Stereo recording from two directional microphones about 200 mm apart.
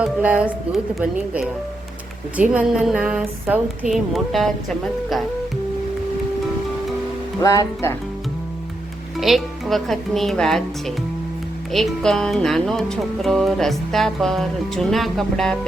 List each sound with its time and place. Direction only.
0.0 s speech: 5° right (ahead or behind)
2.3 s music: 5° right (ahead or behind)
7.4 s speech: 15° left (ahead or behind)
9.1 s music: centre (ahead or behind)